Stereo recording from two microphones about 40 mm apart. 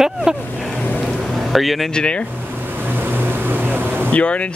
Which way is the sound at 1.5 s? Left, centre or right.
Centre.